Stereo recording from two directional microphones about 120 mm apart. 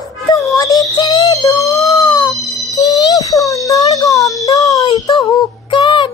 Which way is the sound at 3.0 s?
30° left (ahead or behind).